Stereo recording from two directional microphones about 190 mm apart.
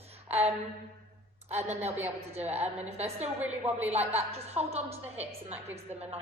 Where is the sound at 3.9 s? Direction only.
35° right (ahead or behind).